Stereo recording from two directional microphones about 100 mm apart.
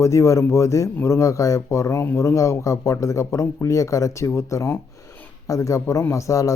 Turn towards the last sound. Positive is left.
turn(degrees=30)  # may be behind; listen again after turning